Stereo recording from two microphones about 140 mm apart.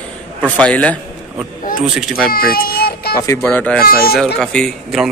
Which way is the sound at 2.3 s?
90° left.